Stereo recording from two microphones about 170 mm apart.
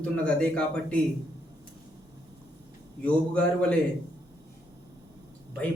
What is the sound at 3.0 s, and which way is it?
Speech, 10° left (ahead or behind).